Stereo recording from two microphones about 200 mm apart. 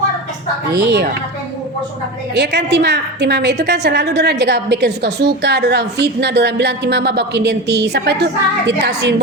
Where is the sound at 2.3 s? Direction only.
60° right (ahead or behind).